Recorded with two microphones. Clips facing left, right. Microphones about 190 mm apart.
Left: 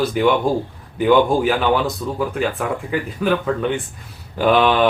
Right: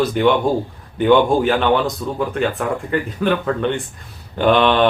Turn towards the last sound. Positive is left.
turn(degrees=5)  # may be behind; listen again after turning